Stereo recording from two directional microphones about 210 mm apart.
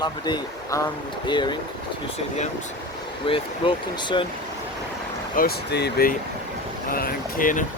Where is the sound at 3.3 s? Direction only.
25° left (ahead or behind).